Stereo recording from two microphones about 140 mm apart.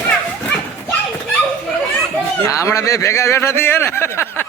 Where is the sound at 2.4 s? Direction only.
20° left (ahead or behind).